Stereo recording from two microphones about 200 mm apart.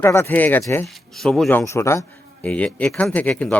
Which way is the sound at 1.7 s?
15° left (ahead or behind).